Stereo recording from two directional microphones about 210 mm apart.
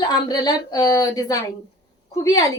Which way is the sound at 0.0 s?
20° left (ahead or behind).